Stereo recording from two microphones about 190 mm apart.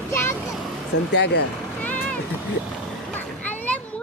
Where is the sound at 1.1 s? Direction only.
65° left (ahead or behind).